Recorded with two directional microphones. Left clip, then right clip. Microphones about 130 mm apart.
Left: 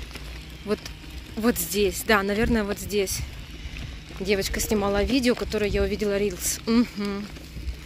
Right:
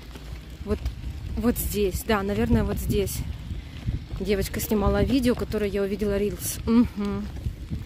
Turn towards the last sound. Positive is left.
turn(degrees=-25)  # may be behind; listen again after turning